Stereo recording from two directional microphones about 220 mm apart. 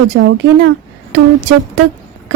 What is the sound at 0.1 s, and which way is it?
Speech, 55° right (ahead or behind).